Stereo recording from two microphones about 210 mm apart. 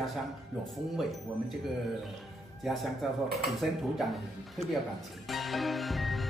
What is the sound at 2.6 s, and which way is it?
Speech, centre (ahead or behind).